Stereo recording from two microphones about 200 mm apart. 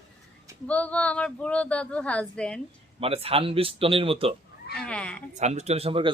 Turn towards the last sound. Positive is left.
turn(degrees=-30)  # may be behind; listen again after turning